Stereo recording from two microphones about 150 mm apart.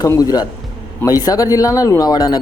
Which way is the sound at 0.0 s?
25° left (ahead or behind).